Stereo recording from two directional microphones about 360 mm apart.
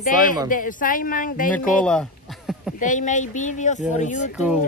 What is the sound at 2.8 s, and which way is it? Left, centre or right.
Speech, left.